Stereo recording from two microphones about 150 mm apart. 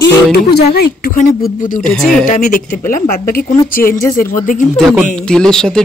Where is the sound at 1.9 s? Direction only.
5° left (ahead or behind).